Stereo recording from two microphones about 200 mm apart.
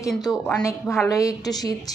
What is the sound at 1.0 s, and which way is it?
Speech, 15° left (ahead or behind).